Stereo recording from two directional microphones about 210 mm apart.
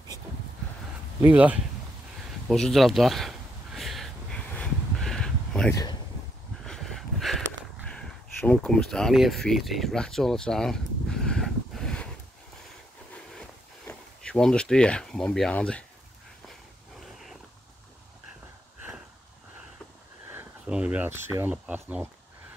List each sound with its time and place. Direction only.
1.2 s speech: 5° right (ahead or behind)
2.4 s a sound: centre (ahead or behind)
5.7 s speech: 15° left (ahead or behind)
6.6 s a sound: centre (ahead or behind)
13.8 s speech: 5° left (ahead or behind)
20.2 s speech: 10° right (ahead or behind)